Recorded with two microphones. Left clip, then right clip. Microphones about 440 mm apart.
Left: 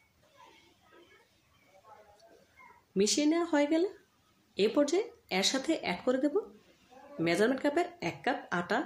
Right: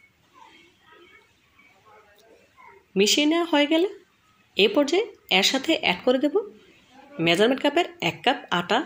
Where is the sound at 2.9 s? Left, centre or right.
Right.